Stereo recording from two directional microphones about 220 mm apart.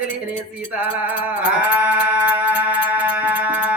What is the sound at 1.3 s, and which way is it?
Music, 5° right (ahead or behind).